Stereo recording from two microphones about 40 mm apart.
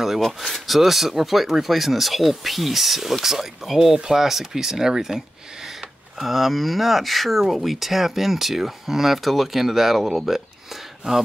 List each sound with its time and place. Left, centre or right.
0.4 s speech: centre
6.2 s speech: centre
11.0 s speech: right